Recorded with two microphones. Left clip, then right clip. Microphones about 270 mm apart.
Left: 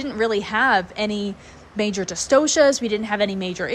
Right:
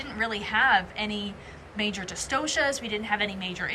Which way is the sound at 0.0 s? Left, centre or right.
Centre.